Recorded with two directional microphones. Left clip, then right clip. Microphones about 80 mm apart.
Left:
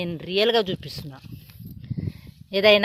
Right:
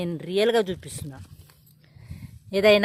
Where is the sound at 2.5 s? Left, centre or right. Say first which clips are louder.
Left 1 dB; right.